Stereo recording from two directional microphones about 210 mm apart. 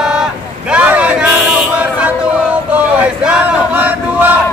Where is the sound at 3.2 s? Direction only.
5° right (ahead or behind).